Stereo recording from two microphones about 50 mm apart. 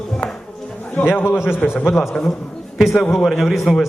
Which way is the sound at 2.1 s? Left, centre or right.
Centre.